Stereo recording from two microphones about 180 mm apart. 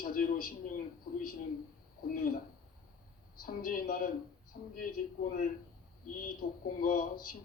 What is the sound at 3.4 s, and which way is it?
A man's voice, 50° left (ahead or behind).